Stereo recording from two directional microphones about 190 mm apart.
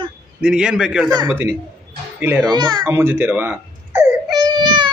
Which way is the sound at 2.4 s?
20° right (ahead or behind).